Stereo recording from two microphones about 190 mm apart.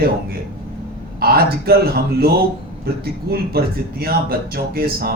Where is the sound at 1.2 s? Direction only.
55° right (ahead or behind).